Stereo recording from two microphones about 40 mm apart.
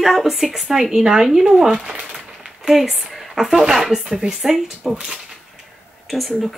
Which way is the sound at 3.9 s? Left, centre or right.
Centre.